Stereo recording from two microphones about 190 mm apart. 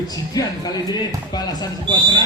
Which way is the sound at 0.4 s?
20° left (ahead or behind).